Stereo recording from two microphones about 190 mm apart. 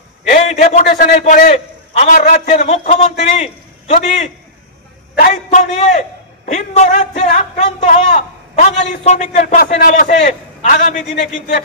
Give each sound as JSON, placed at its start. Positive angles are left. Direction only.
{"t": 0.3, "sound": "a sound", "side_deg": 40}
{"t": 0.8, "sound": "a man's voice", "side_deg": 45}
{"t": 5.3, "sound": "a man's voice", "side_deg": 35}